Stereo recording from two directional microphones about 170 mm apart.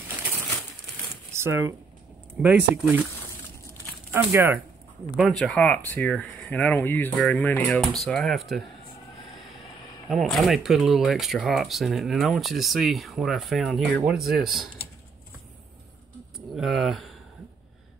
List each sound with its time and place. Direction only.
1.4 s speech: 15° right (ahead or behind)
2.4 s speech: 5° right (ahead or behind)
4.1 s speech: 15° right (ahead or behind)
5.1 s speech: centre (ahead or behind)
10.0 s speech: centre (ahead or behind)
16.3 s a sound: centre (ahead or behind)